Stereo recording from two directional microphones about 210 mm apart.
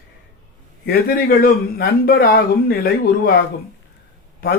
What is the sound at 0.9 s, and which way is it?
Speech, 45° left (ahead or behind).